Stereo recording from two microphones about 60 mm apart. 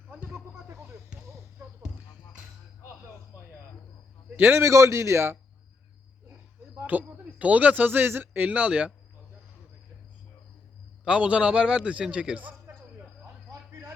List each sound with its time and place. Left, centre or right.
0.1 s a sound: right
1.2 s basketball bounce: right
1.8 s music: centre
4.4 s a man's voice: right
4.6 s speech: right
6.8 s speech: right
11.0 s a man's voice: centre
13.7 s a sound: right